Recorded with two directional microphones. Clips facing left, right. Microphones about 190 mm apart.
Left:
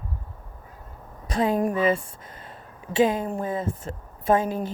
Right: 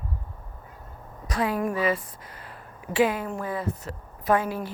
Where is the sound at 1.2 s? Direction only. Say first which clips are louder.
Left 3 dB; 25° left (ahead or behind).